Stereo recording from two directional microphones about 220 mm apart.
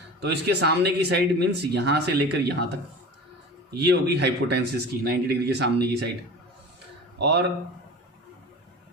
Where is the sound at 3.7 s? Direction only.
50° right (ahead or behind).